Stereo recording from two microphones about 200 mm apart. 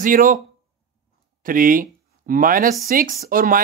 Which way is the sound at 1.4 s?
45° right (ahead or behind).